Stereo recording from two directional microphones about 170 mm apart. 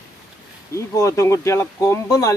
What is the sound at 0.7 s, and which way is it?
Speech, 15° left (ahead or behind).